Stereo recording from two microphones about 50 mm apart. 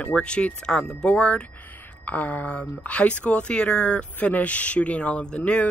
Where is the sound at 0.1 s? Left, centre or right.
Left.